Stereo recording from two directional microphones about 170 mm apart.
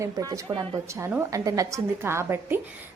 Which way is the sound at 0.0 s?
20° right (ahead or behind).